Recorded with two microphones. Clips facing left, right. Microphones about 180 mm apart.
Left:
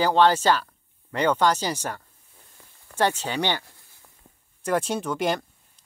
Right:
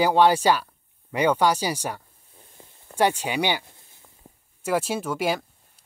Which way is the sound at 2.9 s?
10° right (ahead or behind).